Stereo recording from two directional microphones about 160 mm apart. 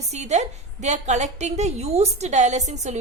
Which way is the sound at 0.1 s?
45° right (ahead or behind).